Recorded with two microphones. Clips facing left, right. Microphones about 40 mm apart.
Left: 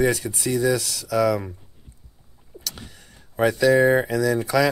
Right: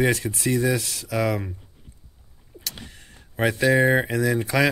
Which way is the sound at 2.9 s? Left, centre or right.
Right.